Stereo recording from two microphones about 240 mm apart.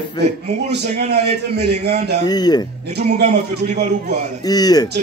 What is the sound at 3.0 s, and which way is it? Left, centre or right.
Speech, right.